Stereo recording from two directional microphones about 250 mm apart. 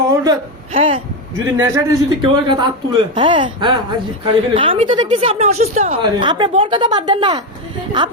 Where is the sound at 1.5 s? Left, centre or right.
Centre.